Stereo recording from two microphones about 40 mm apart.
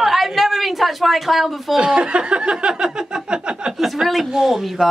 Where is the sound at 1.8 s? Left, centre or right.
Right.